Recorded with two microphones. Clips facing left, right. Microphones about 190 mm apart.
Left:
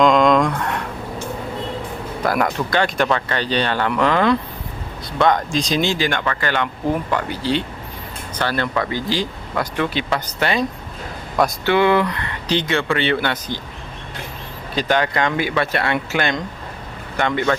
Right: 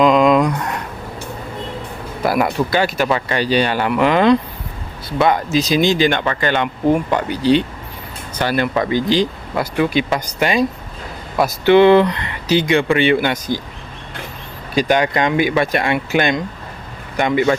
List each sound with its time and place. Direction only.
0.0 s a sound: 5° right (ahead or behind)
2.2 s speech: 10° right (ahead or behind)
5.1 s speech: 5° right (ahead or behind)
11.7 s speech: 25° right (ahead or behind); by 13.6 s 10° right (ahead or behind)
14.8 s speech: 15° right (ahead or behind)